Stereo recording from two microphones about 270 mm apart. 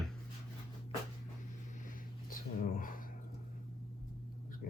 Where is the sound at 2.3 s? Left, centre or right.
Left.